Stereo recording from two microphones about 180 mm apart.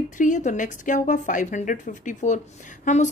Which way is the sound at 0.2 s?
45° left (ahead or behind).